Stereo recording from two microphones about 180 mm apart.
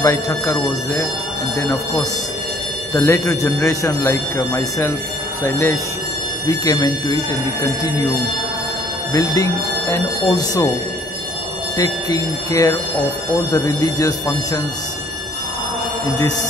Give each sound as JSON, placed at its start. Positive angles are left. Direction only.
{"t": 0.0, "sound": "speech", "side_deg": 15}
{"t": 2.9, "sound": "speech", "side_deg": 15}
{"t": 9.1, "sound": "speech", "side_deg": 20}
{"t": 11.7, "sound": "speech", "side_deg": 20}